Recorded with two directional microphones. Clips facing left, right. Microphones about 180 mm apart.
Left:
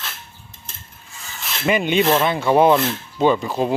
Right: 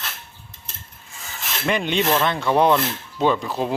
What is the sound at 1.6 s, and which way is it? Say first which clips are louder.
Speech: left 4 dB; 5° left (ahead or behind).